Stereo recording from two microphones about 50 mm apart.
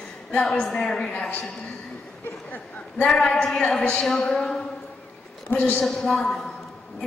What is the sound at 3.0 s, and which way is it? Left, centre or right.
A woman's voice, centre.